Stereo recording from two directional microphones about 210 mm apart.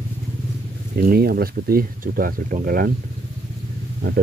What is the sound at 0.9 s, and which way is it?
Speech, 45° right (ahead or behind).